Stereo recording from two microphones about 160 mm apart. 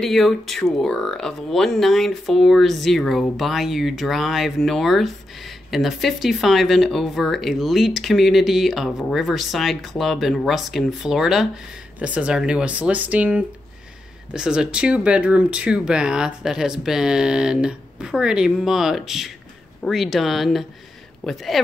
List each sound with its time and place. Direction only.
0.0 s speech: centre (ahead or behind)